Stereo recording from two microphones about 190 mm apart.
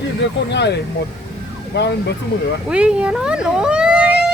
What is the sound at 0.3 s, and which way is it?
Speech, 65° left (ahead or behind).